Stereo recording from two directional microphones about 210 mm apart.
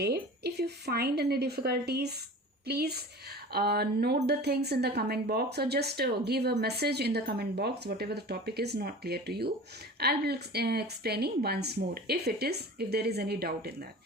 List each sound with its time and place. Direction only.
0.0 s speech: 50° right (ahead or behind)